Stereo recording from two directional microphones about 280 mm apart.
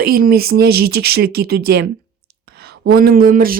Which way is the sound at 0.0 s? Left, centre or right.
Right.